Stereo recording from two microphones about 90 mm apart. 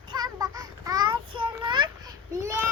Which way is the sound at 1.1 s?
70° right (ahead or behind).